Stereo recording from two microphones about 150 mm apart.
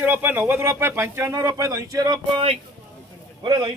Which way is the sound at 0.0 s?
15° right (ahead or behind).